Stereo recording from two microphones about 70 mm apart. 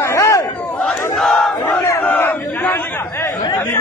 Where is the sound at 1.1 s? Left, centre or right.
Centre.